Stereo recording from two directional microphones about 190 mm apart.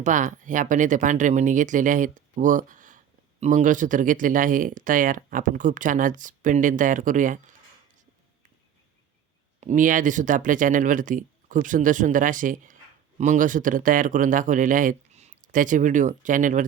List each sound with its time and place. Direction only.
0.0 s speech: 40° right (ahead or behind)
9.6 s speech: 40° right (ahead or behind)